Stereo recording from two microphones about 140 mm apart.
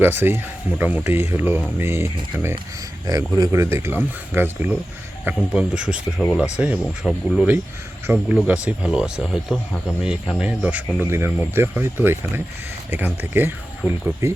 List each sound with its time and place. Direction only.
0.0 s speech: 15° right (ahead or behind)